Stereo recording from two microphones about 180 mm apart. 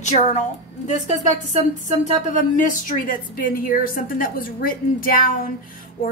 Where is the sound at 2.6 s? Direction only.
50° left (ahead or behind).